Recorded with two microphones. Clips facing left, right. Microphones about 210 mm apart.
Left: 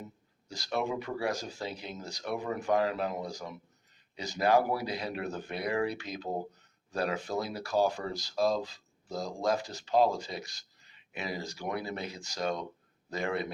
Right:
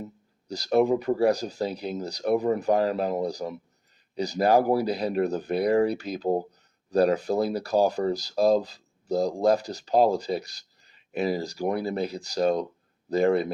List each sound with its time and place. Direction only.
0.4 s speech: 35° right (ahead or behind)